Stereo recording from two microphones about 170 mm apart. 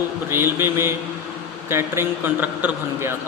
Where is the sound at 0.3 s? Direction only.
15° right (ahead or behind).